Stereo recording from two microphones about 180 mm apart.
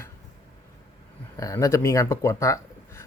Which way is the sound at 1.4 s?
20° left (ahead or behind).